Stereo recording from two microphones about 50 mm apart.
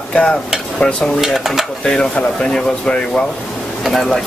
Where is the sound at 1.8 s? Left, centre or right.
Centre.